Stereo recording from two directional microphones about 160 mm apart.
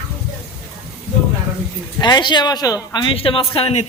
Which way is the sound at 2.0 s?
25° left (ahead or behind).